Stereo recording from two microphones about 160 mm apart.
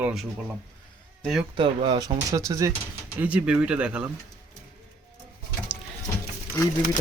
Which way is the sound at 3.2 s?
5° right (ahead or behind).